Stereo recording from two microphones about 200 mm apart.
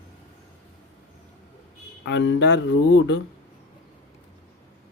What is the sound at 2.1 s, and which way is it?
Speech, 65° left (ahead or behind).